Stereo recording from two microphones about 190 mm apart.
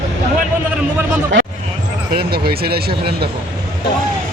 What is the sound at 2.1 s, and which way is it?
Speech, 55° right (ahead or behind).